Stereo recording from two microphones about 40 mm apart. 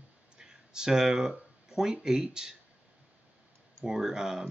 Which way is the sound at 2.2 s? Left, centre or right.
Centre.